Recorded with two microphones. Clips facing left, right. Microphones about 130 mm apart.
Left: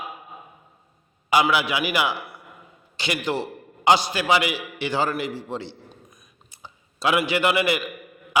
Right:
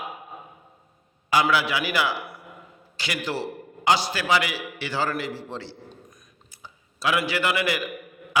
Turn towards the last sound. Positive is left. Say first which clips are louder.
# left 4 dB
turn(degrees=20)  # may be behind; listen again after turning